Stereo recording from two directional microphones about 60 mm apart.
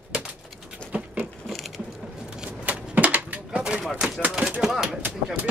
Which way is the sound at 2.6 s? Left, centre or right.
Right.